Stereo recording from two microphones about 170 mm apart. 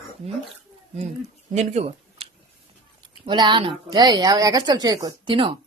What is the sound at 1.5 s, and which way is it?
Speech, 40° right (ahead or behind).